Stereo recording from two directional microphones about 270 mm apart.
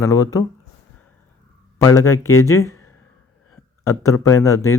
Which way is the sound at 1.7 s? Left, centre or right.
Centre.